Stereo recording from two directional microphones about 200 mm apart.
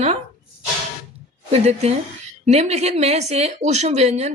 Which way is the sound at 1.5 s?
30° right (ahead or behind).